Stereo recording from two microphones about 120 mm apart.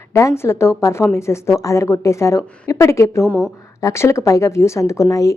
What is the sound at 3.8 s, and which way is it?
A woman's voice, 25° left (ahead or behind).